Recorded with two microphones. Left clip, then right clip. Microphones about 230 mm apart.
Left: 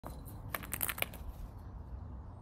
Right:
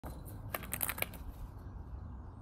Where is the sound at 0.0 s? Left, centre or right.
Centre.